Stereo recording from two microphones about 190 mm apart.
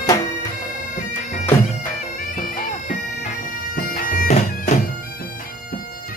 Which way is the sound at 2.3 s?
45° left (ahead or behind).